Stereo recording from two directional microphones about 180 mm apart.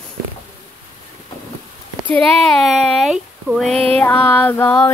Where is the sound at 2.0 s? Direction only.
5° left (ahead or behind).